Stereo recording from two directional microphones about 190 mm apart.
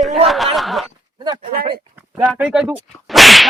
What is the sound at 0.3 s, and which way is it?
Snicker, centre (ahead or behind).